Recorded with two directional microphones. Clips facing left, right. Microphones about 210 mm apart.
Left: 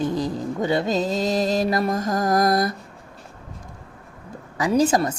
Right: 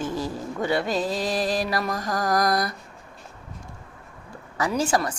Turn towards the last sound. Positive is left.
turn(degrees=20)  # may be behind; listen again after turning